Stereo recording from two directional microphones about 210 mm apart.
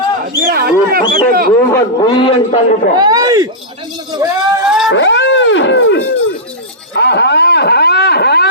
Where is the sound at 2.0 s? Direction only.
25° left (ahead or behind).